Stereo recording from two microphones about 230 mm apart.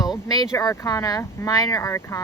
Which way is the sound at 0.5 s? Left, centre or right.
Centre.